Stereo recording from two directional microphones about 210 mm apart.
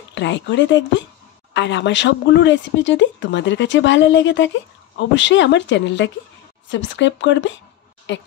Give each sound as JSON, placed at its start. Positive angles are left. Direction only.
{"t": 0.1, "sound": "speech", "side_deg": 60}